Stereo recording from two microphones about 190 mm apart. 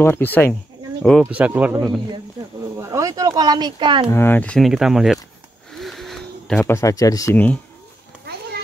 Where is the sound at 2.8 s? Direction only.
15° right (ahead or behind).